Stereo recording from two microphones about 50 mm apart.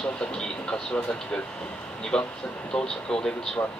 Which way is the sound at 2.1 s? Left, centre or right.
Centre.